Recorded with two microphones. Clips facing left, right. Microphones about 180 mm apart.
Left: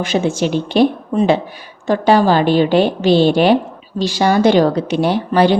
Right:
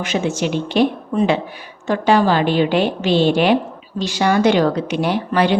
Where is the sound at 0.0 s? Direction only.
35° left (ahead or behind).